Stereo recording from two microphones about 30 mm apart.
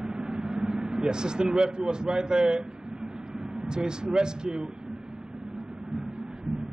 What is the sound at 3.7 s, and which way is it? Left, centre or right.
Speech, right.